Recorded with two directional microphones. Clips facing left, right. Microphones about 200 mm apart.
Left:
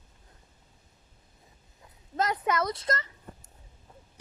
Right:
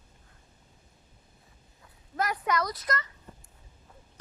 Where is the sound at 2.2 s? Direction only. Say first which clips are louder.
Left 1 dB; 25° left (ahead or behind).